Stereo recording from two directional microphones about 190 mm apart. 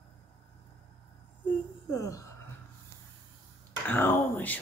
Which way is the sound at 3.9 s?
10° left (ahead or behind).